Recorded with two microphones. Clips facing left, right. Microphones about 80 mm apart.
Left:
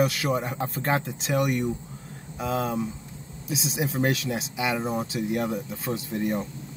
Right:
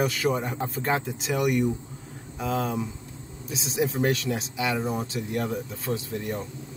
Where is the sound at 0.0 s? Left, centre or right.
Centre.